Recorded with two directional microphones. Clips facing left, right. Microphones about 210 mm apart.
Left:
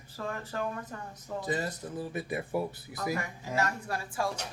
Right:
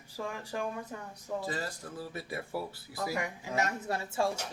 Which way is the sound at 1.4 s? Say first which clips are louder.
Left 5 dB; 20° left (ahead or behind).